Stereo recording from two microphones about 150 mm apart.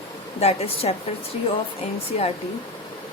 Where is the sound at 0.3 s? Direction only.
40° left (ahead or behind).